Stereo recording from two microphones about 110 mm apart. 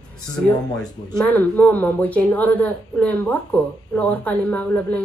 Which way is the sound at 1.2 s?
15° left (ahead or behind).